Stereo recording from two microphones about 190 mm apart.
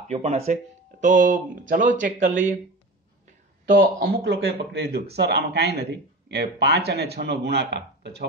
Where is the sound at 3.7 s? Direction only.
50° right (ahead or behind).